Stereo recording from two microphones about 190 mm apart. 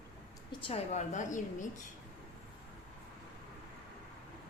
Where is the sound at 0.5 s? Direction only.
30° left (ahead or behind).